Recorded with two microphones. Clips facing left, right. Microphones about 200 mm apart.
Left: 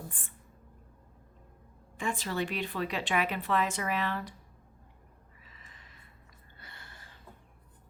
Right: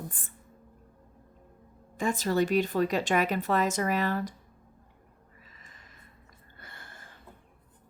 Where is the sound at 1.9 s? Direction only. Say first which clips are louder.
Right 7 dB; 40° right (ahead or behind).